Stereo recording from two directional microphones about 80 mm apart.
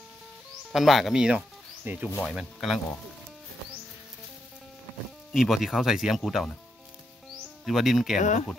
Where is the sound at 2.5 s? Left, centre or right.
Centre.